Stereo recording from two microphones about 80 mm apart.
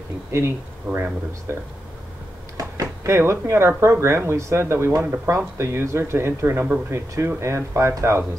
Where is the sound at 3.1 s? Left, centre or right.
Right.